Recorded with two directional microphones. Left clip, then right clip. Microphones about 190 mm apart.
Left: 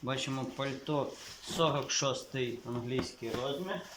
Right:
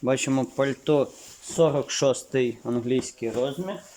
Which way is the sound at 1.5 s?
40° right (ahead or behind).